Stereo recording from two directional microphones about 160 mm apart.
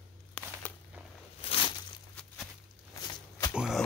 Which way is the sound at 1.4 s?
35° left (ahead or behind).